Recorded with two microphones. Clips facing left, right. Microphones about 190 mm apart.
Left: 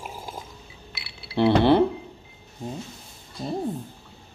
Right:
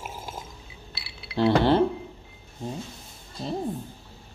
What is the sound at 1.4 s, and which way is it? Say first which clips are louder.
Speech: left 2 dB; 20° left (ahead or behind).